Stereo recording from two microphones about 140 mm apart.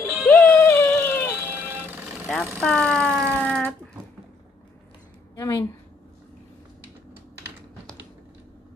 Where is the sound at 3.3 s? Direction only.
10° left (ahead or behind).